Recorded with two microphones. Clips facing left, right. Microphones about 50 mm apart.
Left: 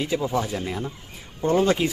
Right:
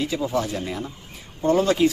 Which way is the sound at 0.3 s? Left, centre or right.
Centre.